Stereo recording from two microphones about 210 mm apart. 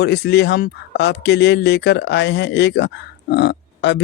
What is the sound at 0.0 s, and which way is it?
Speech, 50° left (ahead or behind).